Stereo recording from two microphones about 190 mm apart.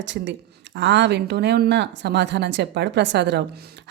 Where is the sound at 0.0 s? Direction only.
70° right (ahead or behind).